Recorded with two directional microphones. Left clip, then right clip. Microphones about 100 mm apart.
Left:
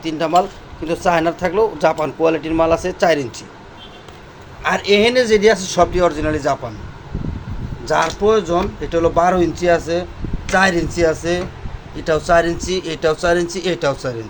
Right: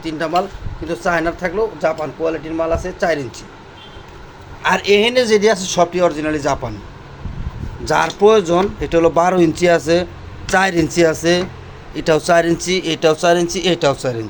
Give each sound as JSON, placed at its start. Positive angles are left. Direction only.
{"t": 0.0, "sound": "speech", "side_deg": 15}
{"t": 1.5, "sound": "speech", "side_deg": 65}
{"t": 4.6, "sound": "a man's voice", "side_deg": -30}
{"t": 6.3, "sound": "a man's voice", "side_deg": -25}
{"t": 7.9, "sound": "speech", "side_deg": -65}
{"t": 12.6, "sound": "speech", "side_deg": -45}